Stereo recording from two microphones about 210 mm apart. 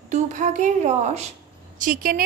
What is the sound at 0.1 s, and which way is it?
A woman's voice, 35° right (ahead or behind).